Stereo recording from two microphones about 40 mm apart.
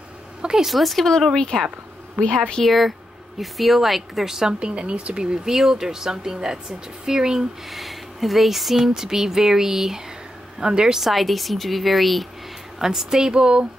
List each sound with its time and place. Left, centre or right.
0.4 s a sound: centre
0.7 s speech: centre
1.3 s a woman's voice: centre
2.6 s speech: centre
4.3 s speech: centre
7.7 s speech: centre; by 11.0 s right
11.0 s speech: centre
12.8 s speech: centre